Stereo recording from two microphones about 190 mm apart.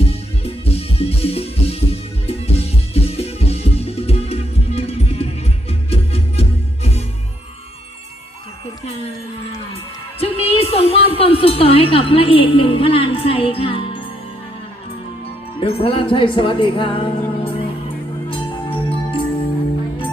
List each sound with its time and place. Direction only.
0.0 s music: 30° left (ahead or behind)
10.2 s a sound: 30° left (ahead or behind)
15.6 s music: 30° left (ahead or behind)